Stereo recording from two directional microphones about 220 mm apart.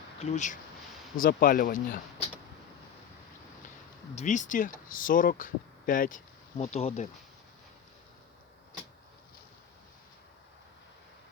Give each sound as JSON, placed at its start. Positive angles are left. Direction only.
{"t": 0.2, "sound": "speech", "side_deg": 35}
{"t": 4.1, "sound": "speech", "side_deg": 30}